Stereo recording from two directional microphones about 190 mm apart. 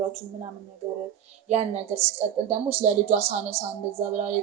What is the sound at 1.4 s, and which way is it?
A woman's voice, 35° right (ahead or behind).